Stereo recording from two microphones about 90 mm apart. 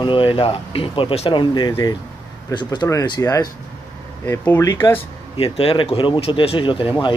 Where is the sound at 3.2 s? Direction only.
40° left (ahead or behind).